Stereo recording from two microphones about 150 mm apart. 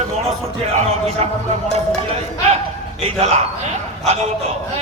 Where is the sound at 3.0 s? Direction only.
40° right (ahead or behind).